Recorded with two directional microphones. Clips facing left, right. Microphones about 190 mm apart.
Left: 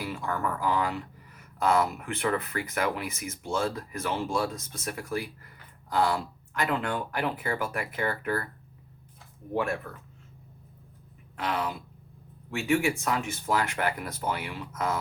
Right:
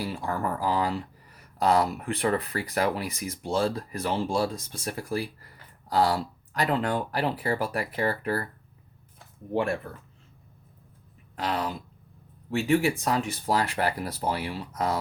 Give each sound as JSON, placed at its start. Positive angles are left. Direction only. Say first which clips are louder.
{"t": 0.0, "sound": "speech", "louder": "right 2 dB", "side_deg": -35}
{"t": 9.5, "sound": "speech", "louder": "right 2 dB", "side_deg": -30}
{"t": 11.3, "sound": "speech", "louder": "right 1 dB", "side_deg": -35}